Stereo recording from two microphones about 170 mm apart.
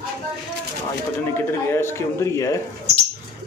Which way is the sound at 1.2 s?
15° left (ahead or behind).